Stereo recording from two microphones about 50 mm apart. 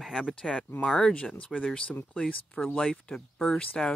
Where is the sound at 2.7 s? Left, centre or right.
Centre.